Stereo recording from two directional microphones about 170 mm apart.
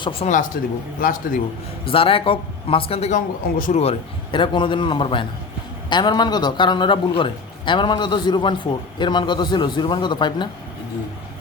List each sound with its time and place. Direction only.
0.0 s a man's voice: 30° left (ahead or behind)
0.3 s speech: 55° left (ahead or behind)
1.8 s a man's voice: 35° left (ahead or behind)
3.2 s a man's voice: 50° left (ahead or behind); by 10.5 s 25° left (ahead or behind)